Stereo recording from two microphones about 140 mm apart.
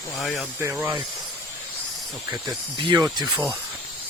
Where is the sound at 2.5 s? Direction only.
30° right (ahead or behind).